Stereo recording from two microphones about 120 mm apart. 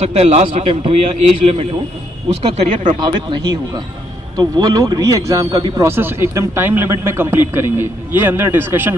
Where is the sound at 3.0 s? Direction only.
40° right (ahead or behind).